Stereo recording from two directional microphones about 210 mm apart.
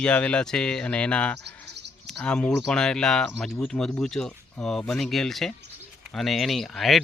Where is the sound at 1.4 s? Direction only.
55° right (ahead or behind).